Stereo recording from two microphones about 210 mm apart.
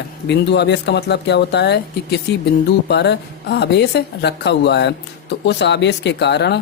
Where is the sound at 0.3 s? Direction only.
55° left (ahead or behind).